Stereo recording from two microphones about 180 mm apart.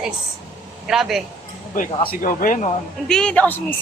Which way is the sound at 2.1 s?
50° left (ahead or behind).